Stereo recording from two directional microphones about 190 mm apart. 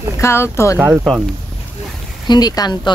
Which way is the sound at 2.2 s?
20° left (ahead or behind).